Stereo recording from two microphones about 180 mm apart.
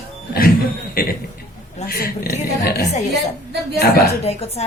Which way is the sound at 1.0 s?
55° left (ahead or behind).